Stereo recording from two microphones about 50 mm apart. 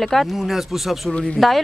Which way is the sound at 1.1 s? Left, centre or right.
Left.